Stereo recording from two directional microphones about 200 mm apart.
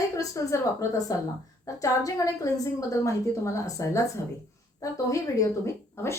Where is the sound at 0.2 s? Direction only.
15° left (ahead or behind).